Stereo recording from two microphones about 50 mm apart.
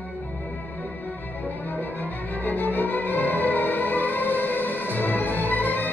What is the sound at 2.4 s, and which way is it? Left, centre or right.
Music, left.